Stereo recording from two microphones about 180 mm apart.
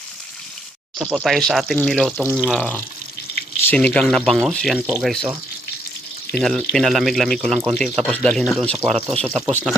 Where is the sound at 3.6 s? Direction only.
10° left (ahead or behind).